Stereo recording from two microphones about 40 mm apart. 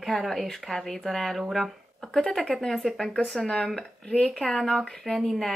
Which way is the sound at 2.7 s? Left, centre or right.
Centre.